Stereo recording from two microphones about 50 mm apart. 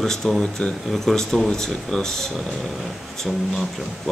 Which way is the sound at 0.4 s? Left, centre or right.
Centre.